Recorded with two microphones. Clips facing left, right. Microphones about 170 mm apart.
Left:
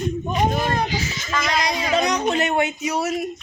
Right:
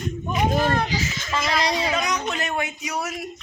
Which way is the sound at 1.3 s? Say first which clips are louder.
Left 1 dB; 30° right (ahead or behind).